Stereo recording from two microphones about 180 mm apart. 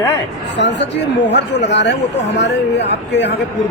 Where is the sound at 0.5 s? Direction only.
75° left (ahead or behind).